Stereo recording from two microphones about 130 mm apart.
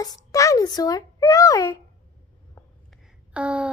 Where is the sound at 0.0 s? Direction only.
25° left (ahead or behind).